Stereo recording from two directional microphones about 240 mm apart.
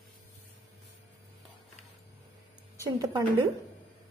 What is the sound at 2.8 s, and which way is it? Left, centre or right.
Speech, centre.